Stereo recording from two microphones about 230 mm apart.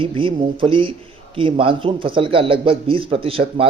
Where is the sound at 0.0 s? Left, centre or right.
Right.